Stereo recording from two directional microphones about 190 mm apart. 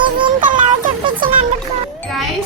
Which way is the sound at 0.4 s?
45° right (ahead or behind).